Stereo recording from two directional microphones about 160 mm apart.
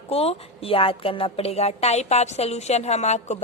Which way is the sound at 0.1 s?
40° left (ahead or behind).